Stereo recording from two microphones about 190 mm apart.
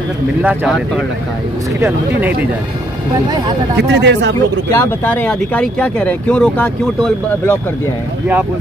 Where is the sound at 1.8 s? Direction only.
10° right (ahead or behind).